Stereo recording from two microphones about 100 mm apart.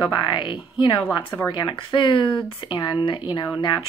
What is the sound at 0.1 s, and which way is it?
Speech, 55° left (ahead or behind).